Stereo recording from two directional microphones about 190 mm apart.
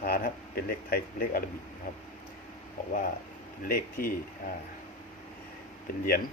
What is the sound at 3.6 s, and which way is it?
Speech, 50° left (ahead or behind).